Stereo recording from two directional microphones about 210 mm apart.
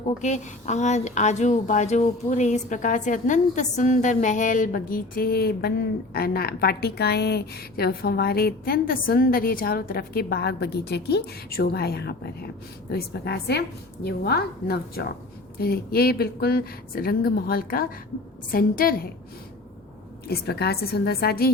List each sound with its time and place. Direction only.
0.0 s a woman's voice: 35° left (ahead or behind)
20.2 s a woman's voice: 50° left (ahead or behind)